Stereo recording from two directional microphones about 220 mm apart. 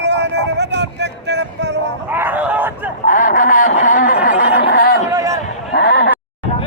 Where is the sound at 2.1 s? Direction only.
10° right (ahead or behind).